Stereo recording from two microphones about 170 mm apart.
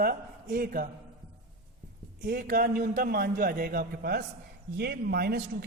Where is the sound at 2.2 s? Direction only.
55° right (ahead or behind).